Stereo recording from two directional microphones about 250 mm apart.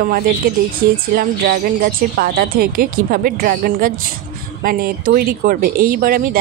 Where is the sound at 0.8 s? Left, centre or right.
Right.